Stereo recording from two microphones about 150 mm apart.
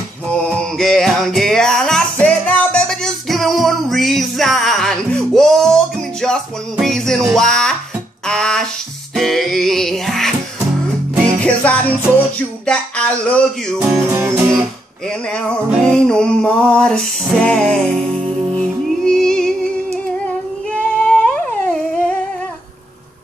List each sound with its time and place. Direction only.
0.5 s music: 5° left (ahead or behind)
8.3 s a sound: 5° left (ahead or behind)
9.1 s music: centre (ahead or behind)
11.4 s music: 10° left (ahead or behind)
12.6 s a sound: 5° left (ahead or behind)
13.9 s music: 15° right (ahead or behind)
15.0 s music: 5° left (ahead or behind)
20.7 s humming: 10° left (ahead or behind)